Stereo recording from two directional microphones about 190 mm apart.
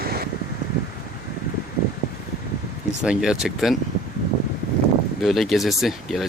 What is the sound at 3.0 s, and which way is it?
Speech, 5° right (ahead or behind).